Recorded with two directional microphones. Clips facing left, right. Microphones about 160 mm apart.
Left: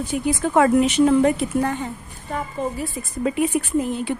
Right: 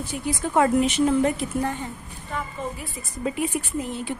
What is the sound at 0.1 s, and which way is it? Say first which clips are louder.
Speech: left 5 dB; 70° left (ahead or behind).